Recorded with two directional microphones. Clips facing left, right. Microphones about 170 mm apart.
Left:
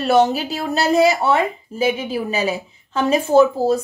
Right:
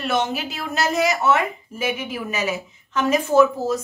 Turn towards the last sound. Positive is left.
turn(degrees=30)  # may be behind; listen again after turning